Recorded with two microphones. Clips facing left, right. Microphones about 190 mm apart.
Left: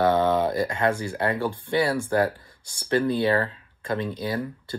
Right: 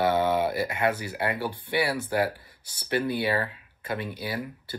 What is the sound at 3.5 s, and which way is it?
Speech, 10° right (ahead or behind).